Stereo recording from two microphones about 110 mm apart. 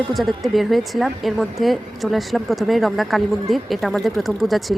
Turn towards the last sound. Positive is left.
turn(degrees=0)  # may be behind; listen again after turning